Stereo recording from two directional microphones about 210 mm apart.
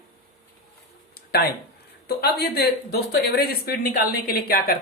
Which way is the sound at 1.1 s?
50° left (ahead or behind).